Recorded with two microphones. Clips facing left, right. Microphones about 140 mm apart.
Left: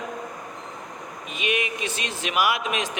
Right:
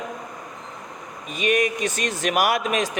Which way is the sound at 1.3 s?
45° right (ahead or behind).